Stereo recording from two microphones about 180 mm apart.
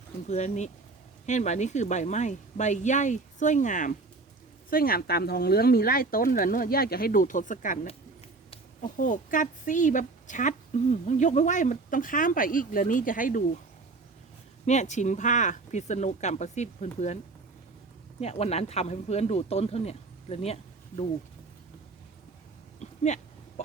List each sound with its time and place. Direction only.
0.3 s speech: 40° left (ahead or behind)
4.7 s speech: 55° left (ahead or behind)
8.8 s a woman's voice: 45° left (ahead or behind)
14.6 s speech: 40° left (ahead or behind)
18.2 s speech: 35° left (ahead or behind)
22.8 s a sound: 40° left (ahead or behind)